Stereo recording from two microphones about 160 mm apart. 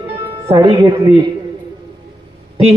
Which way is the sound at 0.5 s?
25° right (ahead or behind).